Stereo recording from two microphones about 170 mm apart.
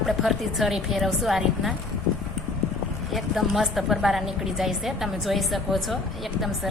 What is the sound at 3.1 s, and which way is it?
Speech, centre (ahead or behind).